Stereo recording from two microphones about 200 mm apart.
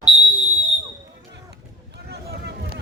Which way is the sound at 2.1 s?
55° right (ahead or behind).